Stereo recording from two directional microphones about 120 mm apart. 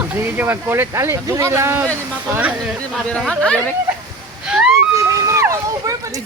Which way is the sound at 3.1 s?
5° left (ahead or behind).